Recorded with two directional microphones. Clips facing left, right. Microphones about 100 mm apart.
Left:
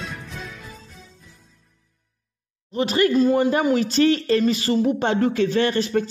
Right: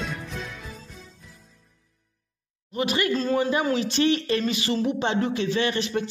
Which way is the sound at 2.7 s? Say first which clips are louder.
Left 5 dB; 35° left (ahead or behind).